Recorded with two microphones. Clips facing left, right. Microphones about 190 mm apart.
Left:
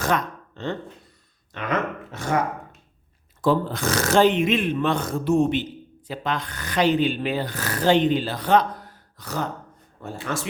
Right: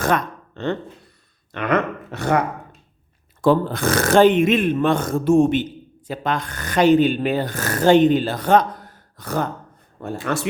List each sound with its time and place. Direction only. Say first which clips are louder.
0.0 s a sound: right 3 dB; 60° right (ahead or behind)
1.5 s speech: right 5 dB; 65° right (ahead or behind)
3.4 s speech: right 4 dB; 60° right (ahead or behind)